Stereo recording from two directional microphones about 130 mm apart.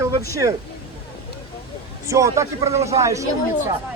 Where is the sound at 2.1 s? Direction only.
25° right (ahead or behind).